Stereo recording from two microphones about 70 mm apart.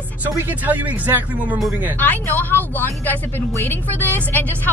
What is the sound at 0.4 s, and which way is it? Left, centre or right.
Speech, right.